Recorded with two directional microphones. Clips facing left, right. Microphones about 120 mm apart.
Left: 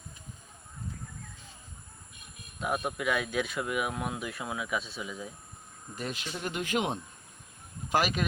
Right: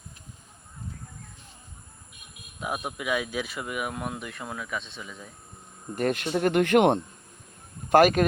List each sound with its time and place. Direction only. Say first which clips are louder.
2.6 s speech: left 1 dB; 5° right (ahead or behind)
6.0 s speech: right 12 dB; 55° right (ahead or behind)
7.9 s speech: right 10 dB; 50° right (ahead or behind)